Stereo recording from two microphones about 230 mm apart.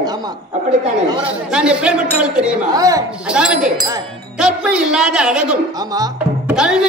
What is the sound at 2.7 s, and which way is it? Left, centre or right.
Speech, centre.